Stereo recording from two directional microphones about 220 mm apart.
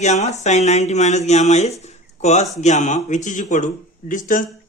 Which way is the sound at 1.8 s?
30° left (ahead or behind).